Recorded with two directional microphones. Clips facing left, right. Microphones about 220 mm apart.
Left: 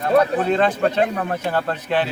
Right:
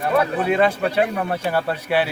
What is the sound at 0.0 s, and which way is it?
A man's voice, 10° right (ahead or behind).